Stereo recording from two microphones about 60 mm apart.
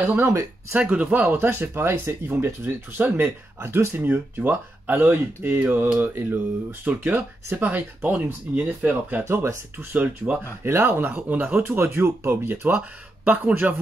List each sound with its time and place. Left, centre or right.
0.0 s speech: right
0.3 s speech: right
0.7 s speech: right
9.2 s speech: right
9.9 s speech: right
10.6 s speech: right